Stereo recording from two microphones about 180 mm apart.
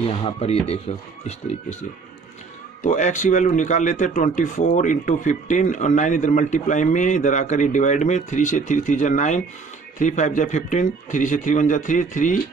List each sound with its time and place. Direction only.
0.0 s speech: 35° left (ahead or behind)
2.8 s speech: 45° left (ahead or behind)